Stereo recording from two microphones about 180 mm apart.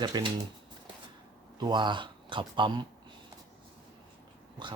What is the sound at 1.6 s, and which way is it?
Speech, 25° right (ahead or behind).